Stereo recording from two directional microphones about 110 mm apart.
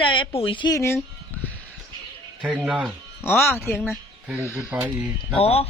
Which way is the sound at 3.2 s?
20° left (ahead or behind).